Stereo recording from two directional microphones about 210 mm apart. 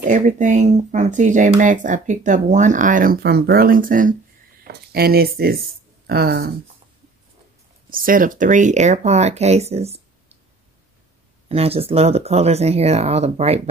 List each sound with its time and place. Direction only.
0.0 s speech: 35° right (ahead or behind)
7.9 s speech: 40° right (ahead or behind)
11.4 s speech: 30° right (ahead or behind)